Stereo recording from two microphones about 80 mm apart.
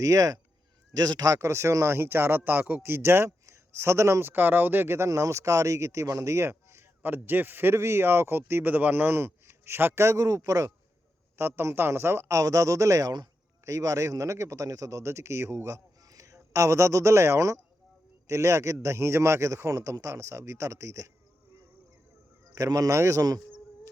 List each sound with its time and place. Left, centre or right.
0.0 s speech: right
11.3 s speech: right
22.5 s speech: right